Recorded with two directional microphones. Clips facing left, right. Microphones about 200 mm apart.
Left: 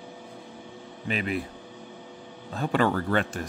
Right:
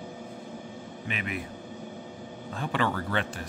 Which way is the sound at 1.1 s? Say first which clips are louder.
Left 6 dB; 35° left (ahead or behind).